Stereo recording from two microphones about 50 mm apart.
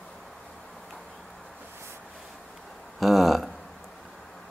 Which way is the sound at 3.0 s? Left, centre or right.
Centre.